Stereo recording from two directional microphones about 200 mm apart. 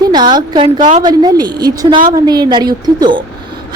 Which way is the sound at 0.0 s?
20° right (ahead or behind).